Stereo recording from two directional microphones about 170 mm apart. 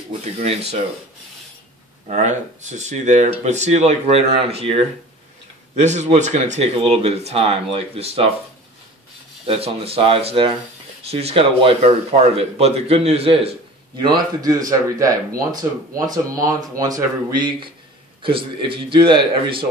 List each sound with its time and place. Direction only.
0.2 s speech: 40° right (ahead or behind)
2.0 s speech: 45° right (ahead or behind)
9.5 s speech: 35° right (ahead or behind)